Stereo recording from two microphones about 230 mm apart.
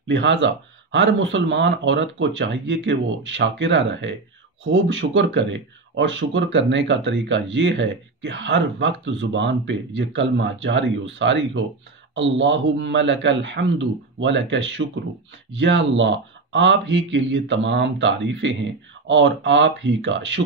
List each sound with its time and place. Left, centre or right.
0.1 s speech: right